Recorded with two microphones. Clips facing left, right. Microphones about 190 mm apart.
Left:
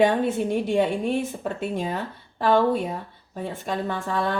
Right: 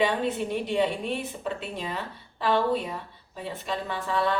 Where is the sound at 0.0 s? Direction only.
50° left (ahead or behind).